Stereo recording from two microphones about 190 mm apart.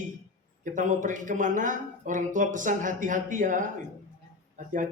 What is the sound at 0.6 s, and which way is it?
Speech, 40° right (ahead or behind).